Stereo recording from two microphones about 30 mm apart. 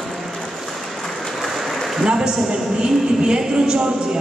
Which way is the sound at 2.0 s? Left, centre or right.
Right.